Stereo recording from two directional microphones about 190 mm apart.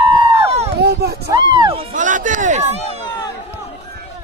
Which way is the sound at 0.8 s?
60° right (ahead or behind).